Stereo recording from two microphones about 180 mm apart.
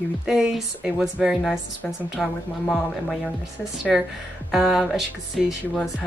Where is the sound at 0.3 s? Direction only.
5° right (ahead or behind).